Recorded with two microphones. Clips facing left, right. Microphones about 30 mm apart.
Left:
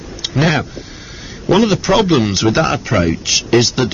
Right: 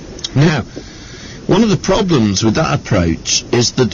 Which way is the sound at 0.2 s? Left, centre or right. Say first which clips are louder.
Right 1 dB; centre.